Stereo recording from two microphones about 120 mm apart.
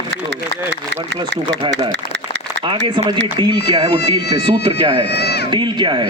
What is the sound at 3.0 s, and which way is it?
Speech, 40° right (ahead or behind).